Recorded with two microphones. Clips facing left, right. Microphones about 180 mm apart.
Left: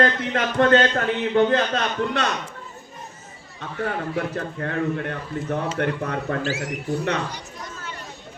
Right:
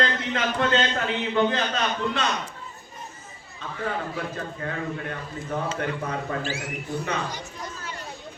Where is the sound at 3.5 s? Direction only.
65° left (ahead or behind).